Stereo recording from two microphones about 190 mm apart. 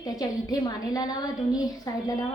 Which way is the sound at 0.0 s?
20° left (ahead or behind).